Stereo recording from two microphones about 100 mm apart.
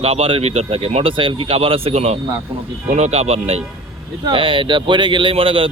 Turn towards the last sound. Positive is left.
turn(degrees=-65)  # may be behind; listen again after turning